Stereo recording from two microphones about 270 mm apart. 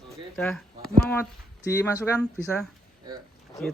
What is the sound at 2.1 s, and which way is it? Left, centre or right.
Speech, centre.